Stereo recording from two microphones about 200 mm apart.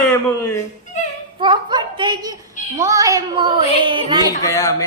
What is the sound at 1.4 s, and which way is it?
A child's voice, 25° right (ahead or behind).